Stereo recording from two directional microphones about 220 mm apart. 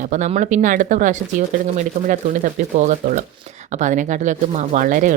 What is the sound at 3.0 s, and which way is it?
A woman's voice, 30° right (ahead or behind).